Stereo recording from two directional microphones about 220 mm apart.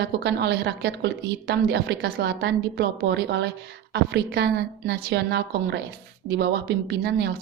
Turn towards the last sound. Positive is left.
turn(degrees=-50)  # may be behind; listen again after turning